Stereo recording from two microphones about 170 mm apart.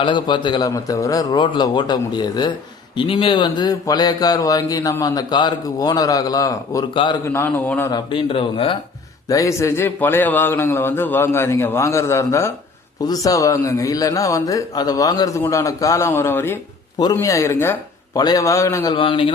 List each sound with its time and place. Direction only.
0.0 s speech: 30° left (ahead or behind)
7.3 s a man's voice: 15° left (ahead or behind)
7.9 s speech: 30° left (ahead or behind)
9.3 s a man's voice: 20° left (ahead or behind)